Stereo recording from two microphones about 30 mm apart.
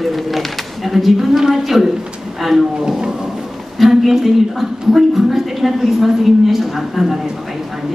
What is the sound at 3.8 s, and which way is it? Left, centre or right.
A woman's voice, centre.